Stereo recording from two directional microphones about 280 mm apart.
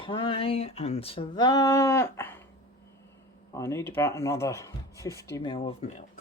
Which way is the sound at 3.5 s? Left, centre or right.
Centre.